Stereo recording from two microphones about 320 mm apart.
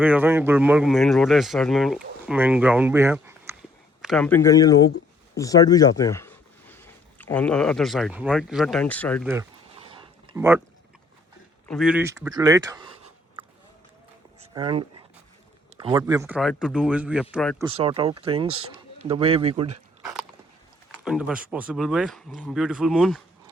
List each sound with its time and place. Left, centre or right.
0.0 s speech: centre
9.3 s a sound: centre
11.7 s speech: centre
14.5 s speech: centre
17.6 s speech: centre
21.0 s speech: centre